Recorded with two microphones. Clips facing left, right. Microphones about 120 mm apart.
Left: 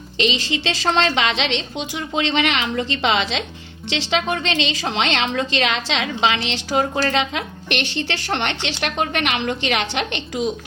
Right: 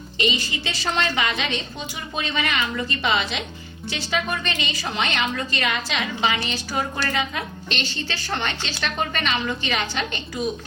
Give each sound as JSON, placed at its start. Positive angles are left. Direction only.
{"t": 0.2, "sound": "a woman's voice", "side_deg": 90}